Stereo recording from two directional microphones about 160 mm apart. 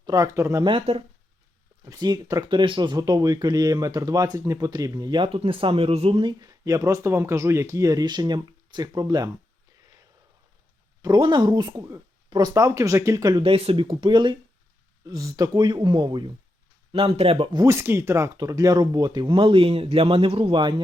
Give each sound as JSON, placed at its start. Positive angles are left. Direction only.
{"t": 0.0, "sound": "speech", "side_deg": -20}
{"t": 0.6, "sound": "speech", "side_deg": -35}
{"t": 1.8, "sound": "speech", "side_deg": -20}
{"t": 6.4, "sound": "speech", "side_deg": -20}
{"t": 11.0, "sound": "speech", "side_deg": -25}